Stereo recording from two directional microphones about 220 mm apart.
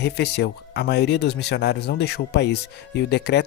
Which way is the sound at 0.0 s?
50° left (ahead or behind).